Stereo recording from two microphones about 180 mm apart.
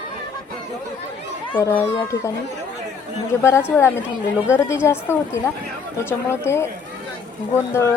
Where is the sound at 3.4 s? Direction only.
15° left (ahead or behind).